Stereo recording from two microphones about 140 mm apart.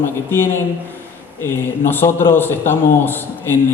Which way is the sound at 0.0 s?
15° left (ahead or behind).